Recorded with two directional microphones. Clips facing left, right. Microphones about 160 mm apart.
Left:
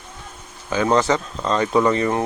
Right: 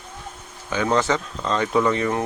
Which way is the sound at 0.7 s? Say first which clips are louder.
Left 3 dB; 35° left (ahead or behind).